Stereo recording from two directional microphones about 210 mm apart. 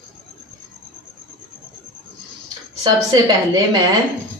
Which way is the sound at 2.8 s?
20° right (ahead or behind).